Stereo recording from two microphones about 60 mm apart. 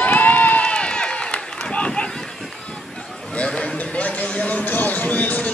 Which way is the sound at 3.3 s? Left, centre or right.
Centre.